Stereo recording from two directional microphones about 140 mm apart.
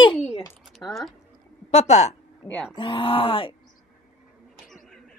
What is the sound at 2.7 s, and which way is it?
Speech, 35° left (ahead or behind).